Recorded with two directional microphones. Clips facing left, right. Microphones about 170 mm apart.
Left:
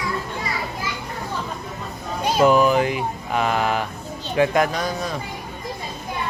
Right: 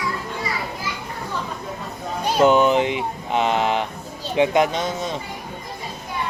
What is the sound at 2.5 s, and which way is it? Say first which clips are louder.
Speech: even; 25° right (ahead or behind).